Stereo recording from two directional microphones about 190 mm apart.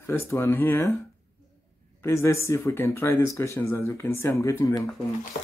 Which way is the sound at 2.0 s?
15° left (ahead or behind).